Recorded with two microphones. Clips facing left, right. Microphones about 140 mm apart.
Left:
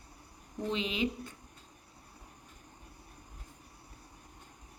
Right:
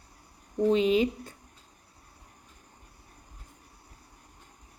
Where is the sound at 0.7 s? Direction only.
40° right (ahead or behind).